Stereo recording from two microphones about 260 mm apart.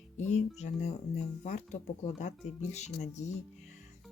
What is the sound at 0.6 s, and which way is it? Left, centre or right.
Speech, left.